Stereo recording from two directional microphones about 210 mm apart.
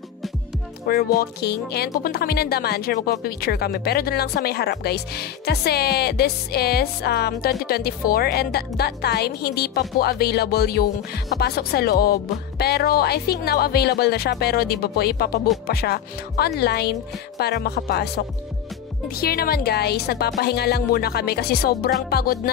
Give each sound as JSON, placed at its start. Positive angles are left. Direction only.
{"t": 0.8, "sound": "speech", "side_deg": 45}